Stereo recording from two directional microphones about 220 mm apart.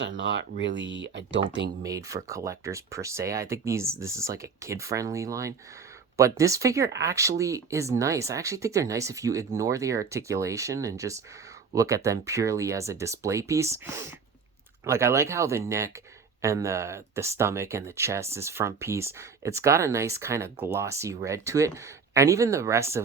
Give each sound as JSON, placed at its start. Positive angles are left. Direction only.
{"t": 0.2, "sound": "speech", "side_deg": -55}
{"t": 1.8, "sound": "speech", "side_deg": -15}